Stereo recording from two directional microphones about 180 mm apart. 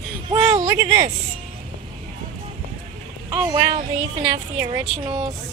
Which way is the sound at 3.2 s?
20° right (ahead or behind).